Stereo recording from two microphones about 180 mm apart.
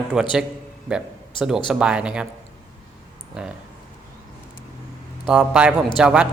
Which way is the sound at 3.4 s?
5° right (ahead or behind).